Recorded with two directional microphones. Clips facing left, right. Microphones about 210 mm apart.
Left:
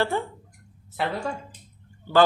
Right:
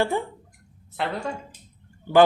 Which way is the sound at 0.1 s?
15° right (ahead or behind).